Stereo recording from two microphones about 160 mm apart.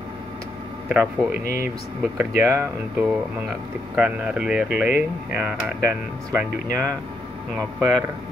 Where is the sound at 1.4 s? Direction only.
60° left (ahead or behind).